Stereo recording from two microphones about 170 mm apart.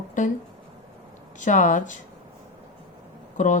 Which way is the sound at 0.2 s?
50° left (ahead or behind).